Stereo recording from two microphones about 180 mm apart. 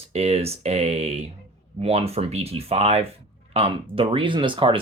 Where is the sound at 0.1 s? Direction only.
35° right (ahead or behind).